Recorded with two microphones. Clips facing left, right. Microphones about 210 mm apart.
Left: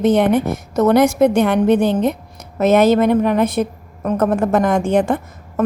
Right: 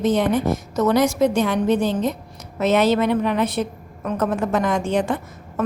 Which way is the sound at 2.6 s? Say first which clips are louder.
Left 5 dB; 50° left (ahead or behind).